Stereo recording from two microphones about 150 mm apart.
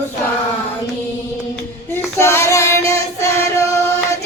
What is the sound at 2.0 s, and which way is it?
Child singing, 15° left (ahead or behind).